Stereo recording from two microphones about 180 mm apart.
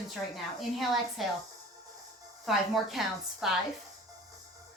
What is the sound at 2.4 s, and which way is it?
A woman's voice, centre (ahead or behind).